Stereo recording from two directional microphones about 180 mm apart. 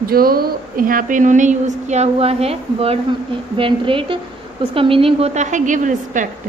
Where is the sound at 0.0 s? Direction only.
55° right (ahead or behind).